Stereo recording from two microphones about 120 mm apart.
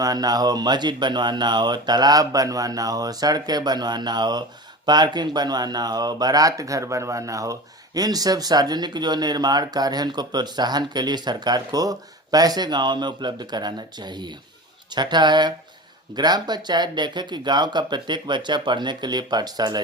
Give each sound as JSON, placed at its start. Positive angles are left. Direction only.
{"t": 0.0, "sound": "speech", "side_deg": -35}